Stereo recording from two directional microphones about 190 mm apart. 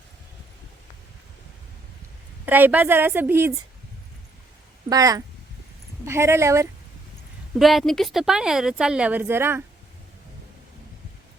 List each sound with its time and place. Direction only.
2.5 s a woman's voice: 10° right (ahead or behind)
4.9 s a woman's voice: 20° right (ahead or behind)
7.6 s a woman's voice: centre (ahead or behind)